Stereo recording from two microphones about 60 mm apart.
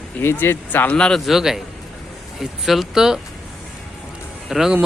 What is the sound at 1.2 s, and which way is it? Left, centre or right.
Speech, centre.